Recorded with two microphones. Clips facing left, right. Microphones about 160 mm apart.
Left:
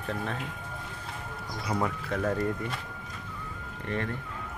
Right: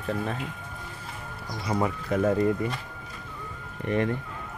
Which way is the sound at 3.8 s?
15° right (ahead or behind).